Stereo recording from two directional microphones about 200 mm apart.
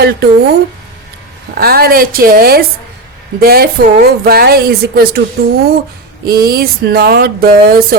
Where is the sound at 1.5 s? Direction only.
50° right (ahead or behind).